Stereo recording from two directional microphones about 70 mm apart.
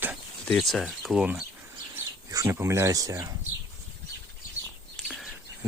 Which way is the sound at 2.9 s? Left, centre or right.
Right.